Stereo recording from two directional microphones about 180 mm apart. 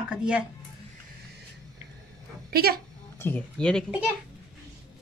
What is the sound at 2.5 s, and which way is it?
Speech, 60° right (ahead or behind).